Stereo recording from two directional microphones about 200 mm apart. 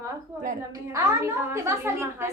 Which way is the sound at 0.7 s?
15° right (ahead or behind).